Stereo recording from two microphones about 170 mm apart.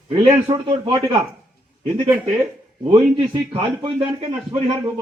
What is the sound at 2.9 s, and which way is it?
A man's voice, 30° right (ahead or behind).